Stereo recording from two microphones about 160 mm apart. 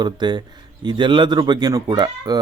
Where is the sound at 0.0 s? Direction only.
25° right (ahead or behind).